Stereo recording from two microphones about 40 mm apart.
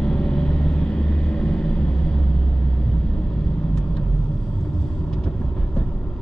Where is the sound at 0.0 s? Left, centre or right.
Left.